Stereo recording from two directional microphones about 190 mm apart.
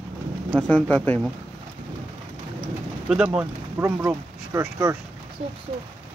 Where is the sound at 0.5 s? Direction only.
5° left (ahead or behind).